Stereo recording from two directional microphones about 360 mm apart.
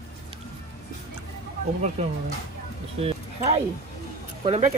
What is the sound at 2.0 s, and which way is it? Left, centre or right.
Speech, centre.